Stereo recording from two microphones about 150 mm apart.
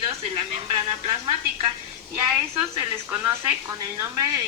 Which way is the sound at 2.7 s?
20° right (ahead or behind).